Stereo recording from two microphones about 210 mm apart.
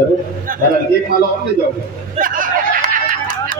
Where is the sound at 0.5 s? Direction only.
40° right (ahead or behind).